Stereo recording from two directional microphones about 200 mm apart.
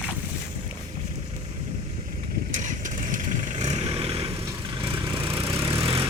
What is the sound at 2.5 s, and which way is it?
Vehicle, 40° right (ahead or behind).